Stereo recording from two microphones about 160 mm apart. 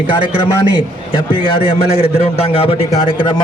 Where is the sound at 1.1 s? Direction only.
35° left (ahead or behind).